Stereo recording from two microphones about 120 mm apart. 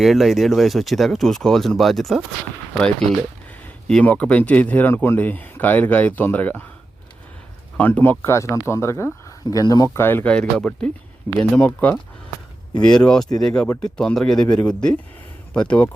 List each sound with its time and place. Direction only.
0.0 s speech: centre (ahead or behind); by 6.7 s 15° left (ahead or behind)
7.8 s speech: 15° left (ahead or behind)